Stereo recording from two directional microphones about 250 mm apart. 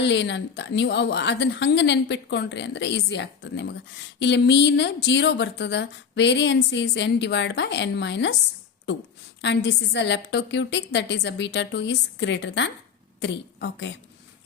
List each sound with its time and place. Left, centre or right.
0.0 s a woman's voice: left